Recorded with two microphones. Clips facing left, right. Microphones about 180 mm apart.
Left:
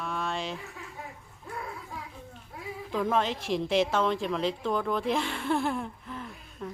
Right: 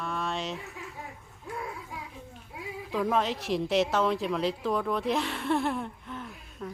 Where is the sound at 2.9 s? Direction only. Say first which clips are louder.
Even; centre (ahead or behind).